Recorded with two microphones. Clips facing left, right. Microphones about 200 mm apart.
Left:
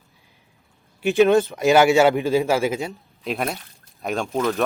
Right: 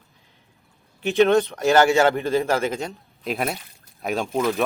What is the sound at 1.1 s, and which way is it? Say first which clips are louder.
Speech: left 1 dB; centre (ahead or behind).